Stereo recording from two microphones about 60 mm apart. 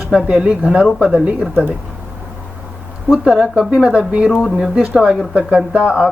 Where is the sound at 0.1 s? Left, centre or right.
Centre.